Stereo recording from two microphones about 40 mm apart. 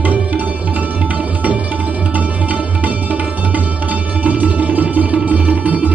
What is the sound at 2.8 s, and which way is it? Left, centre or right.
Music, right.